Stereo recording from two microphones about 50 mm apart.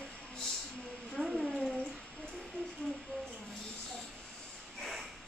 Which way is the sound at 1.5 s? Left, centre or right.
Centre.